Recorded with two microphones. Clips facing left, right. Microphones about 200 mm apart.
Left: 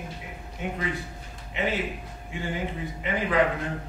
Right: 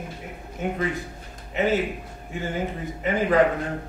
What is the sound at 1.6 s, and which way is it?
Speech, 40° right (ahead or behind).